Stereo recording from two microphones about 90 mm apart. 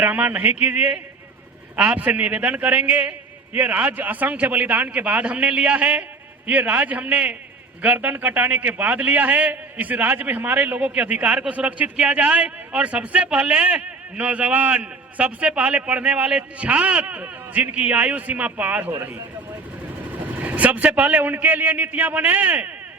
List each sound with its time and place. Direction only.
0.0 s a man's voice: 20° right (ahead or behind)
20.4 s a man's voice: 20° right (ahead or behind)